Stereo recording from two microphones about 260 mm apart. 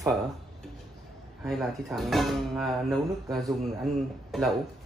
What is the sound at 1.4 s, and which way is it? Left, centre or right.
Speech, centre.